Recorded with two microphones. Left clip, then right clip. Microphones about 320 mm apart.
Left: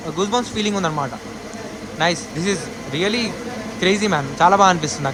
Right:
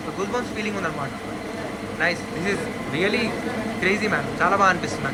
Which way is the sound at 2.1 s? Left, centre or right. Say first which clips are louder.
Left 2 dB; centre.